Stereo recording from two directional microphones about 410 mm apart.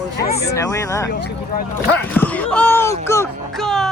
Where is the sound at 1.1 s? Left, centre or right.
Left.